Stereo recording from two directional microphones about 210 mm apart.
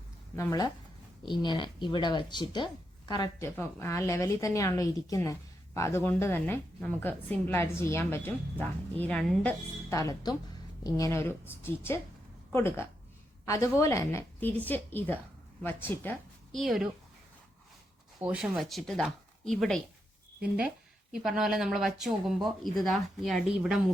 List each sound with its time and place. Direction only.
0.3 s a woman's voice: 15° left (ahead or behind); by 16.9 s centre (ahead or behind)
18.2 s speech: 5° right (ahead or behind)
21.1 s speech: 5° right (ahead or behind)